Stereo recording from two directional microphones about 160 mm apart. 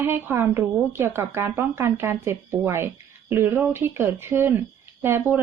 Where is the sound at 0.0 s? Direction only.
15° right (ahead or behind).